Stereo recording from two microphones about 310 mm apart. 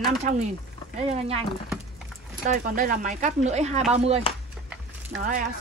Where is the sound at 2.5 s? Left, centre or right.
Right.